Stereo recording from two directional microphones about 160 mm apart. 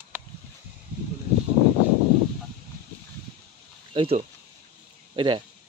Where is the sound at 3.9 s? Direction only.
35° right (ahead or behind).